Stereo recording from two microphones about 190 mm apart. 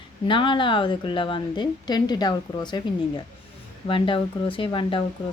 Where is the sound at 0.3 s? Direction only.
25° left (ahead or behind).